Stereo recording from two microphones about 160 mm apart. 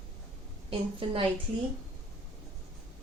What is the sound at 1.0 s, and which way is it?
Speech, 35° right (ahead or behind).